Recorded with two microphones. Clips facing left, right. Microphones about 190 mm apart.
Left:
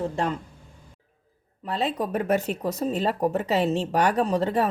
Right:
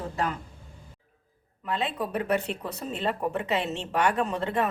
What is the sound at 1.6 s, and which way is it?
Speech, 35° left (ahead or behind).